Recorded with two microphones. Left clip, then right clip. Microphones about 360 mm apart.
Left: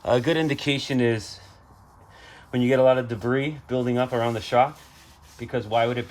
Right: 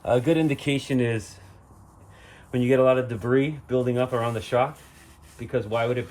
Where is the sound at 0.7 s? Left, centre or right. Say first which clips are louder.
Left 2 dB; centre.